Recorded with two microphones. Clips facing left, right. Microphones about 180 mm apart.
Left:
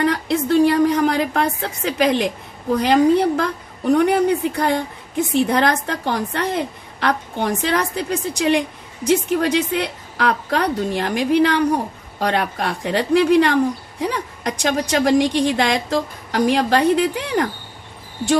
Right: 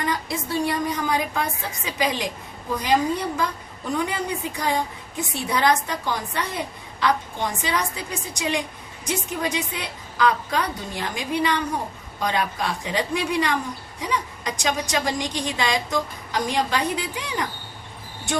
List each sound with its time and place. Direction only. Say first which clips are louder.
0.0 s a woman's voice: left 8 dB; 70° left (ahead or behind)